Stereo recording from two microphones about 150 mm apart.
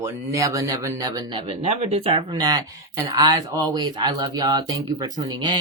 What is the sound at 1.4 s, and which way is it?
Speech, 45° right (ahead or behind).